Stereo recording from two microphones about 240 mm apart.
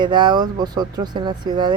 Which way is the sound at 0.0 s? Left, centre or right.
Centre.